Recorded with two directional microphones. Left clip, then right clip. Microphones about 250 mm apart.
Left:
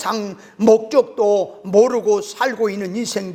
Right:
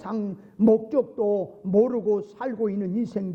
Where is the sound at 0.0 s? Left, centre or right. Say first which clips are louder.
Left 10 dB; centre.